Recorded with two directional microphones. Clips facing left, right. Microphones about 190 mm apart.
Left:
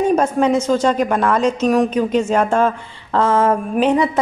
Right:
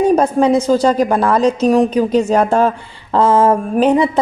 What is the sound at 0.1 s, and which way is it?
A woman's voice, 35° right (ahead or behind).